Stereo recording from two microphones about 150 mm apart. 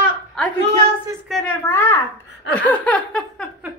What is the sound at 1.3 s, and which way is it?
Speech, centre (ahead or behind).